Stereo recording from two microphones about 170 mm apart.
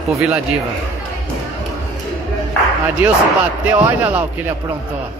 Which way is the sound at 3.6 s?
10° right (ahead or behind).